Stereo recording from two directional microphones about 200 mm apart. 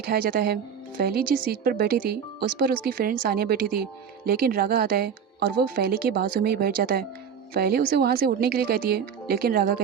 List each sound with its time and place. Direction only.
0.0 s a woman's voice: 50° right (ahead or behind)